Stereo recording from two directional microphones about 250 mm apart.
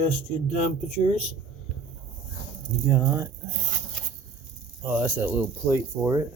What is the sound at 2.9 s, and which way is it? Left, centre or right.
Speech, centre.